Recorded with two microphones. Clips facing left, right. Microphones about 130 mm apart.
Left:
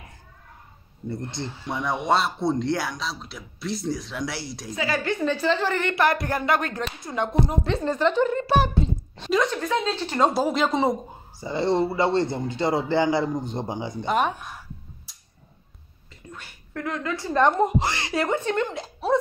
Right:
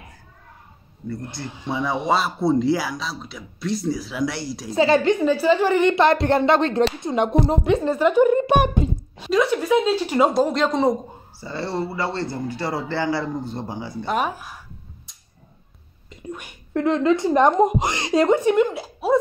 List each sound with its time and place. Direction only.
1.4 s a man's voice: 20° left (ahead or behind)
1.7 s speech: centre (ahead or behind)
4.7 s a woman's voice: 25° right (ahead or behind)
5.2 s a woman's voice: 10° right (ahead or behind)
9.1 s speech: 5° right (ahead or behind)
10.3 s speech: 5° left (ahead or behind)
11.3 s a man's voice: 15° left (ahead or behind)
14.0 s speech: centre (ahead or behind)
16.1 s a woman's voice: 15° right (ahead or behind)